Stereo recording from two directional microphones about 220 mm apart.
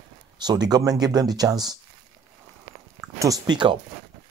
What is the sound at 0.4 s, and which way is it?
Speech, 20° right (ahead or behind).